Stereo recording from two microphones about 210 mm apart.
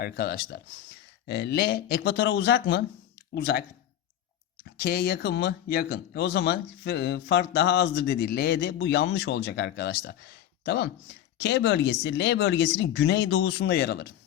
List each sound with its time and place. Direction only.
0.0 s speech: 50° left (ahead or behind)
4.8 s speech: 50° left (ahead or behind)